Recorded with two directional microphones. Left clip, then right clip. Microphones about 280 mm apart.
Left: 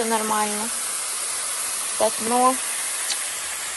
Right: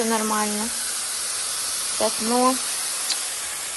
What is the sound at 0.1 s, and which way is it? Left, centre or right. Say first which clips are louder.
Speech: left 1 dB; centre.